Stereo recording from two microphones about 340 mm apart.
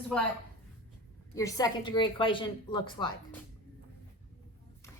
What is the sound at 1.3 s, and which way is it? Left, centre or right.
Speech, centre.